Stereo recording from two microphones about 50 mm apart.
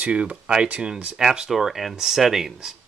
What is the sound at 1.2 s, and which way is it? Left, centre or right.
Speech, centre.